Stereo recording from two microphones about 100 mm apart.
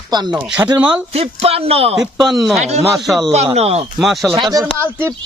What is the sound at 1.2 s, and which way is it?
Speech, 85° right.